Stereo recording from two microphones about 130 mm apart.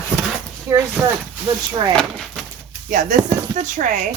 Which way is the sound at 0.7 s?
20° right (ahead or behind).